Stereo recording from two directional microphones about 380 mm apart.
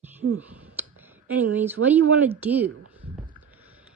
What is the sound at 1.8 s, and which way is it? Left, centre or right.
Speech, right.